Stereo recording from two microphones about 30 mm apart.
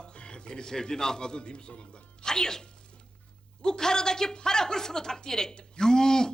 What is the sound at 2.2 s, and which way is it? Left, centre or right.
A woman's voice, left.